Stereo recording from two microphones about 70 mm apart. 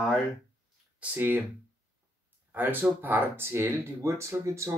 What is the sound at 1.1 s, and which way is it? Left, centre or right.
Speech, right.